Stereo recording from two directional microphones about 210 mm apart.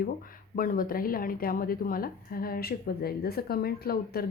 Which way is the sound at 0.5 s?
40° left (ahead or behind).